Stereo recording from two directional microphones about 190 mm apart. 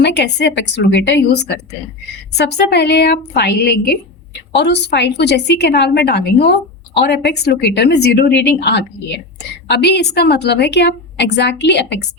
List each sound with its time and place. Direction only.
0.0 s a woman's voice: 65° left (ahead or behind)